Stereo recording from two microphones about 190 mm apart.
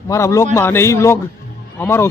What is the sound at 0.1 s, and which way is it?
Speech, 15° left (ahead or behind).